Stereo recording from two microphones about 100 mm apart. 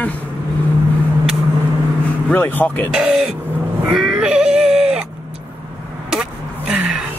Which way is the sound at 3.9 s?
5° right (ahead or behind).